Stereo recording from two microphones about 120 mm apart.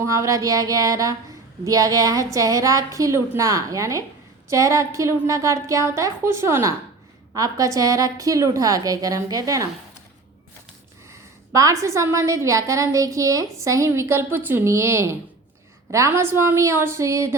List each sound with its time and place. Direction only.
0.0 s a woman's voice: 25° right (ahead or behind)
11.1 s a woman's voice: 25° right (ahead or behind)